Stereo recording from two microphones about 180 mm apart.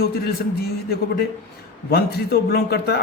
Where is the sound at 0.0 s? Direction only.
60° left (ahead or behind).